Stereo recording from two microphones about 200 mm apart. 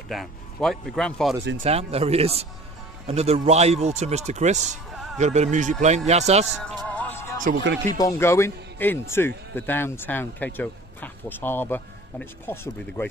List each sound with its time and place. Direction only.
0.1 s speech: centre (ahead or behind)
1.6 s speech: 30° right (ahead or behind)
6.5 s music: centre (ahead or behind)
7.9 s a man's voice: 15° left (ahead or behind)